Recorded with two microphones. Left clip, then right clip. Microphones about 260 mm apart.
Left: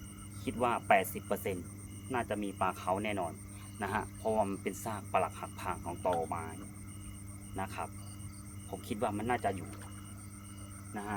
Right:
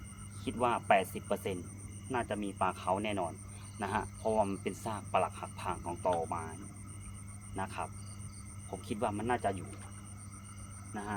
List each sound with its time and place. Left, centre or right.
0.4 s speech: centre
8.9 s speech: centre
10.9 s speech: centre